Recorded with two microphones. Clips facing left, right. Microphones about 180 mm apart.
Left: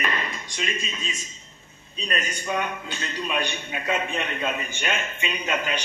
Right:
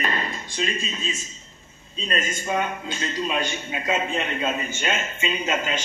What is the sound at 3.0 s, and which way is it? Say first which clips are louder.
Speech: right 2 dB; 40° right (ahead or behind).